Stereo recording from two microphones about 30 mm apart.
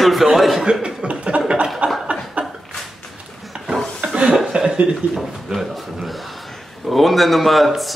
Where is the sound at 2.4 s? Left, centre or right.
Right.